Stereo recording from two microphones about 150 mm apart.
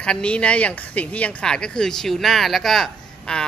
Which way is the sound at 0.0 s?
5° left (ahead or behind).